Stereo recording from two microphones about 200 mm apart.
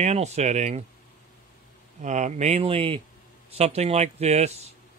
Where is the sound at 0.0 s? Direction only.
35° right (ahead or behind).